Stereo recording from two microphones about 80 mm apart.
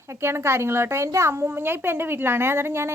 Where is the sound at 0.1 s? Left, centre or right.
Right.